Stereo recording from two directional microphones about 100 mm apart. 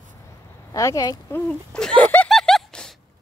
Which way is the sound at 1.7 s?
10° left (ahead or behind).